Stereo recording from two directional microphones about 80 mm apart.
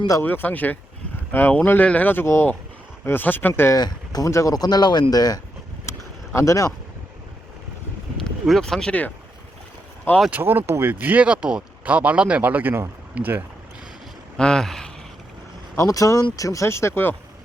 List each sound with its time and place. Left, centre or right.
0.2 s speech: left
2.2 s speech: left
3.0 s speech: left
3.8 s speech: left
4.3 s speech: left
4.5 s speech: left
5.9 s a sound: left
6.3 s speech: left
8.4 s speech: centre
10.3 s speech: right
14.3 s speech: centre
15.8 s speech: left